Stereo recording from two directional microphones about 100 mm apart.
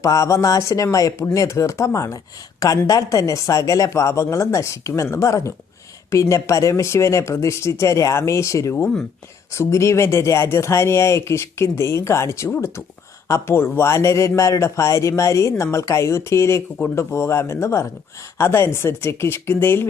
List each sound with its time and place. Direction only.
0.0 s a man's voice: 35° left (ahead or behind)
8.7 s speech: 10° left (ahead or behind)
9.5 s a man's voice: 30° left (ahead or behind)